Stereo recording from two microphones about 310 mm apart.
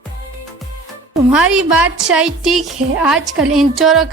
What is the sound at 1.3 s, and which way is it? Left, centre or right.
A woman's voice, centre.